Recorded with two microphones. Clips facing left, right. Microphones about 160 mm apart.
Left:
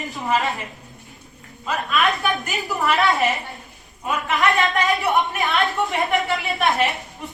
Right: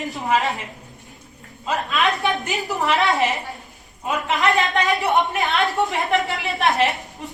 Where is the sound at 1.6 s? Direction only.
20° right (ahead or behind).